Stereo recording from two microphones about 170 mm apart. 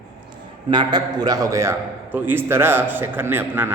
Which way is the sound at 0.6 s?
25° right (ahead or behind).